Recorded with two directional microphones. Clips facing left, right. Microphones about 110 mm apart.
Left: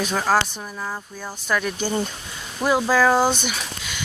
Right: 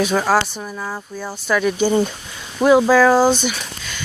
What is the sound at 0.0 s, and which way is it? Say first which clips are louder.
Speech: right 4 dB; 5° right (ahead or behind).